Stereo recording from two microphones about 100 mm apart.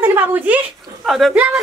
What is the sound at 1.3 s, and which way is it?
Speech, 15° right (ahead or behind).